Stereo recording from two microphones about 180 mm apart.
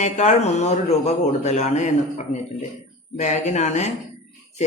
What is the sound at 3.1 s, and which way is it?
Speech, 40° left (ahead or behind).